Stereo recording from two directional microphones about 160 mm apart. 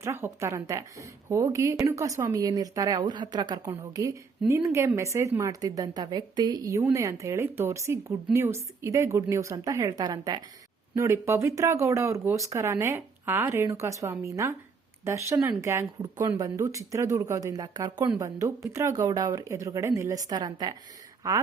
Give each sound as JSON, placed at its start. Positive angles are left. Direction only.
{"t": 0.0, "sound": "a woman's voice", "side_deg": -15}